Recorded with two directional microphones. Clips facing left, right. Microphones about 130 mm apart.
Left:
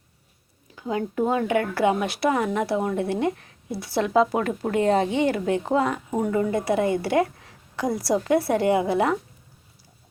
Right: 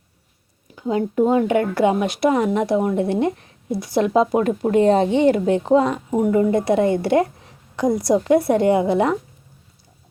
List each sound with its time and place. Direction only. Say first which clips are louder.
0.8 s speech: right 6 dB; 25° right (ahead or behind)